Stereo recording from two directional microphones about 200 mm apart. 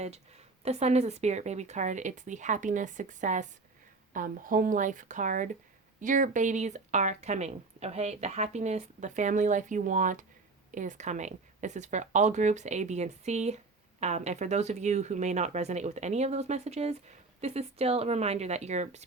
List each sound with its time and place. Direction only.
0.6 s speech: 30° right (ahead or behind)